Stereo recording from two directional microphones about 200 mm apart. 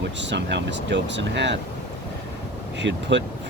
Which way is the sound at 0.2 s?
60° right (ahead or behind).